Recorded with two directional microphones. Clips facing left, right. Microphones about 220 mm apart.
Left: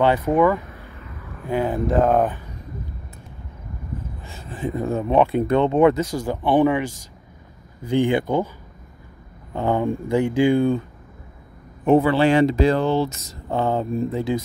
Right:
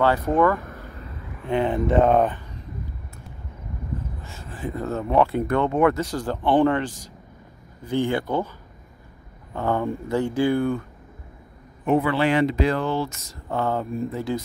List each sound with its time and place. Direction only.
0.0 s speech: 15° left (ahead or behind)
0.6 s vehicle: 45° right (ahead or behind)
0.9 s vehicle: 30° right (ahead or behind)
1.4 s speech: centre (ahead or behind)
4.2 s speech: 15° left (ahead or behind)
7.9 s speech: 15° left (ahead or behind)
9.6 s speech: 15° left (ahead or behind)
11.8 s speech: 30° left (ahead or behind); by 14.4 s 15° left (ahead or behind)